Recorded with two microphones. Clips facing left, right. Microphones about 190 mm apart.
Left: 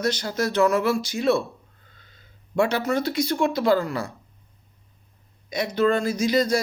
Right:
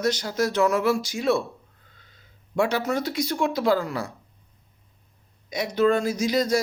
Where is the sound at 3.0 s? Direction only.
60° left (ahead or behind).